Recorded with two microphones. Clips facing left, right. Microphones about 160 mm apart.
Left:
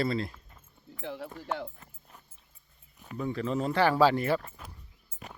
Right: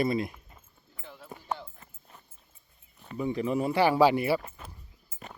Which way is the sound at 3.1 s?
15° right (ahead or behind).